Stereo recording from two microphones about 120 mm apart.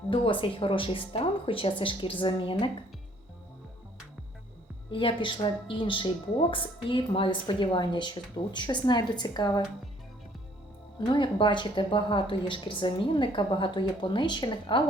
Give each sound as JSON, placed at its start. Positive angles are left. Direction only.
{"t": 0.1, "sound": "a woman's voice", "side_deg": 45}
{"t": 4.9, "sound": "a woman's voice", "side_deg": 45}
{"t": 11.0, "sound": "a woman's voice", "side_deg": 40}